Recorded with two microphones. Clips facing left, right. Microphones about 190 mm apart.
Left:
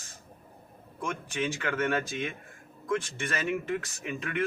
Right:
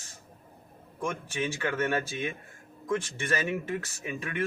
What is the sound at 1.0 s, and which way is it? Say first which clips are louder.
Speech: right 1 dB; 10° right (ahead or behind).